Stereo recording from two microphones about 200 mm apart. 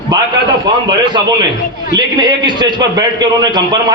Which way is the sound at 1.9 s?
20° right (ahead or behind).